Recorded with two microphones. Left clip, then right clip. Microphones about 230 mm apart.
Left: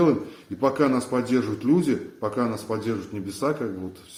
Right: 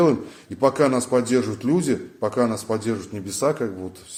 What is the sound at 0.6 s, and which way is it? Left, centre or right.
A man's voice, right.